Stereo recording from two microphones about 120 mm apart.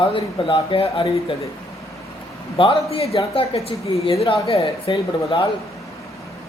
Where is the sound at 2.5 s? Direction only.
50° left (ahead or behind).